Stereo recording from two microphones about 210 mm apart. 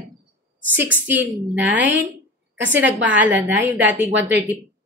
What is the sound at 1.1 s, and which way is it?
Speech, 10° right (ahead or behind).